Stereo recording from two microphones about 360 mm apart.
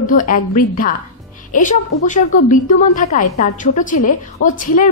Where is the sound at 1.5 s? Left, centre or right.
Left.